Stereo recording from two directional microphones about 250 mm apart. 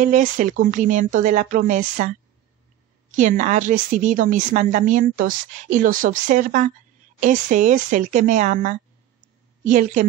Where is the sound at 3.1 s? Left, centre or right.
Right.